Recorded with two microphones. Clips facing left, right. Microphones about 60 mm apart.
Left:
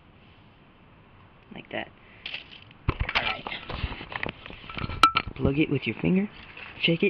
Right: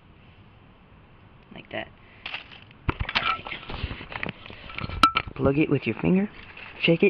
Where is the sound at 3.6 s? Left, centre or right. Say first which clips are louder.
Even; centre.